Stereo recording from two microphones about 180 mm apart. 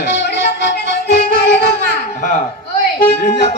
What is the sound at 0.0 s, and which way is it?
Music, 80° left.